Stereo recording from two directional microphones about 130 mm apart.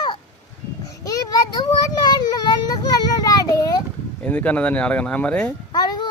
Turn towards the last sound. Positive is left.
turn(degrees=30)  # may be behind; listen again after turning